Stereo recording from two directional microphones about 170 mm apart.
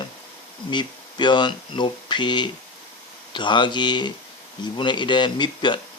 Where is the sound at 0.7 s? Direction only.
25° left (ahead or behind).